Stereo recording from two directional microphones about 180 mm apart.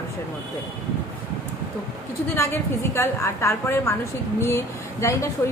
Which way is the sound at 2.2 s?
15° left (ahead or behind).